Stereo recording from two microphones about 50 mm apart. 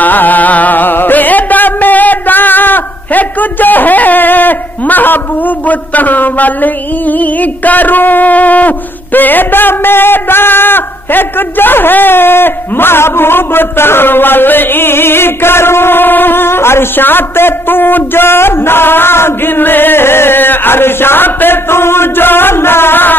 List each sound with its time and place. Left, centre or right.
0.0 s music: left